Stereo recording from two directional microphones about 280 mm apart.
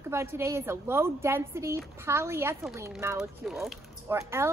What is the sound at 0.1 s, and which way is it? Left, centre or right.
Speech, centre.